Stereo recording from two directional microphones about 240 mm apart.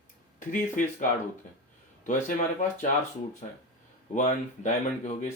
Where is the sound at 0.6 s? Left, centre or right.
Left.